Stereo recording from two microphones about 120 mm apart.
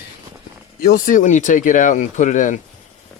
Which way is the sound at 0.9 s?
90° left.